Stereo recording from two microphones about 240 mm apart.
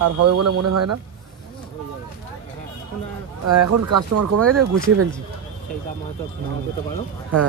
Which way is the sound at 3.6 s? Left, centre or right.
Right.